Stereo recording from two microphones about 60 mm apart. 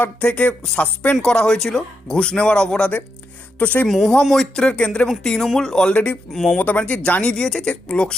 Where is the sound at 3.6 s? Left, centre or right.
Left.